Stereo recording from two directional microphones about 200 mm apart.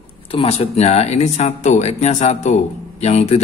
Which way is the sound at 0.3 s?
30° left (ahead or behind).